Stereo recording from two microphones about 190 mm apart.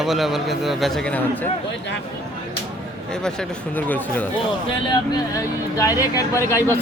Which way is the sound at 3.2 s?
5° left (ahead or behind).